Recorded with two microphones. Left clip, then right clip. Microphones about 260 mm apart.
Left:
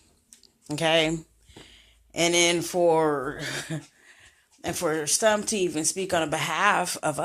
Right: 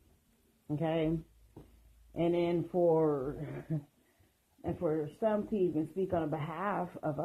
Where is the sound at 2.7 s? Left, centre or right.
Left.